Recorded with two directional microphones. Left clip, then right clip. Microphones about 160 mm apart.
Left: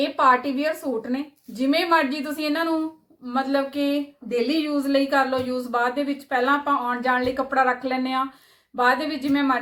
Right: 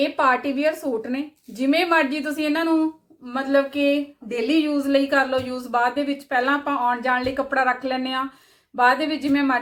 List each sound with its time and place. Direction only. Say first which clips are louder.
0.0 s a woman's voice: left 1 dB; 20° right (ahead or behind)